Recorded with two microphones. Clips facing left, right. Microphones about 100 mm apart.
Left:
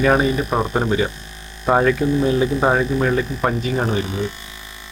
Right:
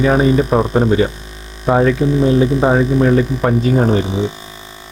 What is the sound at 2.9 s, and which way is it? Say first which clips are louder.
Speech: right 6 dB; 30° right (ahead or behind).